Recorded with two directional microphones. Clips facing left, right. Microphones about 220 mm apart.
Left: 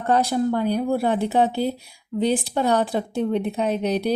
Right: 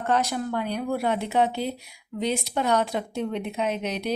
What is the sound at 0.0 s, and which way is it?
Speech, 35° left (ahead or behind).